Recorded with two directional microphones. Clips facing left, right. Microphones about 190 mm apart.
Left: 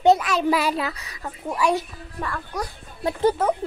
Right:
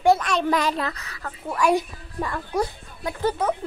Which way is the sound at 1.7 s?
15° right (ahead or behind).